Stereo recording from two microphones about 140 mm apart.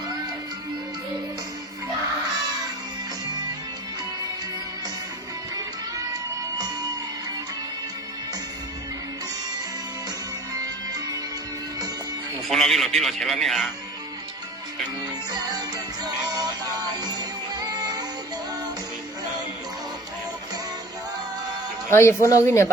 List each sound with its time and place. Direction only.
5.5 s music: 25° right (ahead or behind)
10.5 s music: 25° right (ahead or behind)
12.5 s a man's voice: centre (ahead or behind)
15.3 s music: 30° right (ahead or behind)
21.8 s speech: 20° left (ahead or behind)